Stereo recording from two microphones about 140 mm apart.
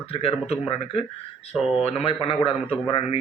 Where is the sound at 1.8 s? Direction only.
45° left (ahead or behind).